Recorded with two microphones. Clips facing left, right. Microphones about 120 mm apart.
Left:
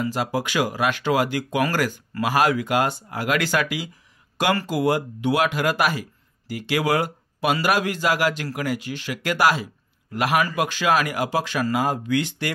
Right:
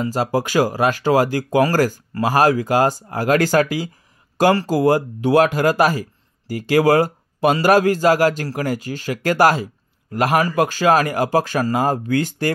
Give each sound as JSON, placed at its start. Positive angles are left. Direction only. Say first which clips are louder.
{"t": 0.0, "sound": "speech", "louder": "right 4 dB", "side_deg": -40}